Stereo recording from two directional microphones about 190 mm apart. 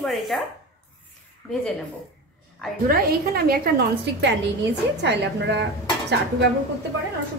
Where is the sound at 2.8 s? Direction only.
50° right (ahead or behind).